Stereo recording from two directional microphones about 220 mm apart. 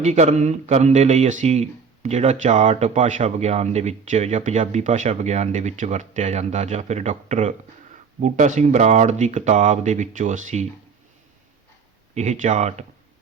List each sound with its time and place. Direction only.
0.0 s speech: 30° right (ahead or behind)
12.1 s speech: 30° right (ahead or behind)